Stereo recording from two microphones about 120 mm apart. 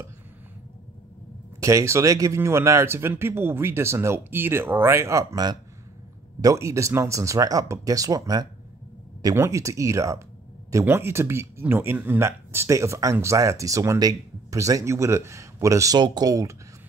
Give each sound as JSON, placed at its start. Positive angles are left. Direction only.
{"t": 1.6, "sound": "speech", "side_deg": -25}